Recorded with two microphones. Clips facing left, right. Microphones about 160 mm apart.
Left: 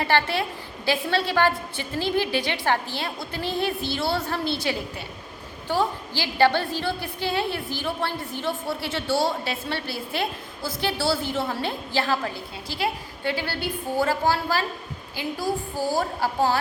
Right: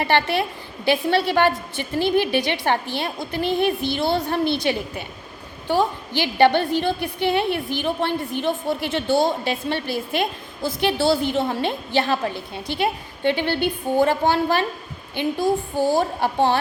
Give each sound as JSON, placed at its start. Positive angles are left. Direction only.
{"t": 0.0, "sound": "a woman's voice", "side_deg": -15}